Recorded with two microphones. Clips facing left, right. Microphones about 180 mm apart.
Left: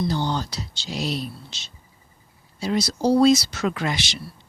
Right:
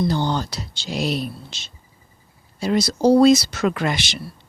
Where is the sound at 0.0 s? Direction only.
55° right (ahead or behind).